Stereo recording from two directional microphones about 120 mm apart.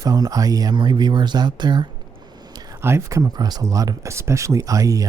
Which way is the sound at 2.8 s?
25° right (ahead or behind).